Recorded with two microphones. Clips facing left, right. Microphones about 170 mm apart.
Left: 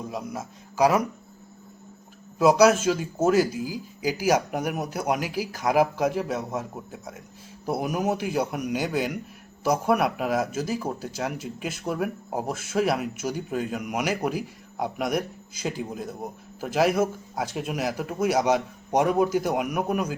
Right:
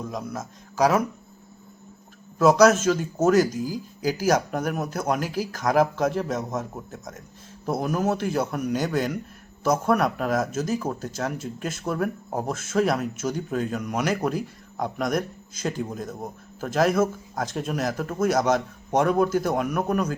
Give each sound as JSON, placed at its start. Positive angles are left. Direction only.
{"t": 0.0, "sound": "a man's voice", "side_deg": 10}
{"t": 2.4, "sound": "speech", "side_deg": 10}